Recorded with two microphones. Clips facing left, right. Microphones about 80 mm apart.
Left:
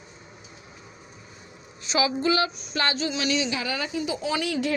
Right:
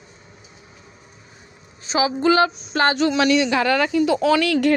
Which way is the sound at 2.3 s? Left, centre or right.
Right.